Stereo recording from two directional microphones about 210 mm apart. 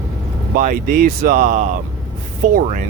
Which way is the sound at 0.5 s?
40° right (ahead or behind).